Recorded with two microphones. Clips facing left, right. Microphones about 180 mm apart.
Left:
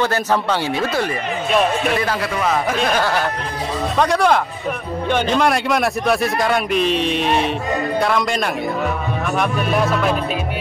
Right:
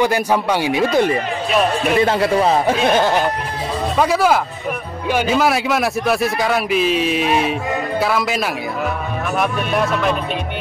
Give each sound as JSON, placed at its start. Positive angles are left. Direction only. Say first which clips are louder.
{"t": 0.0, "sound": "speech", "louder": "right 2 dB", "side_deg": -10}
{"t": 2.0, "sound": "speech", "louder": "right 6 dB", "side_deg": -25}
{"t": 4.0, "sound": "a man's voice", "louder": "even", "side_deg": -5}